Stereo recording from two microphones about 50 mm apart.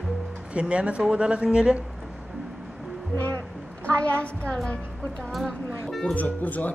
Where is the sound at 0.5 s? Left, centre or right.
Right.